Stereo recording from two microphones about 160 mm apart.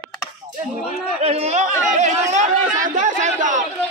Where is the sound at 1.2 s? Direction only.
40° right (ahead or behind).